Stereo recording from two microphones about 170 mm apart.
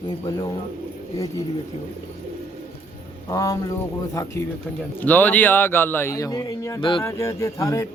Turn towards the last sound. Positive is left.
turn(degrees=20)  # may be behind; listen again after turning